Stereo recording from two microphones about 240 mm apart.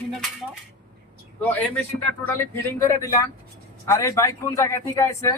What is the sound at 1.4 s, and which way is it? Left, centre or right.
Speech, centre.